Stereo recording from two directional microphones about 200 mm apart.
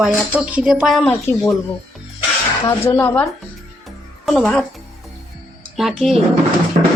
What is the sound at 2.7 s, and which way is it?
Speech, 10° left (ahead or behind).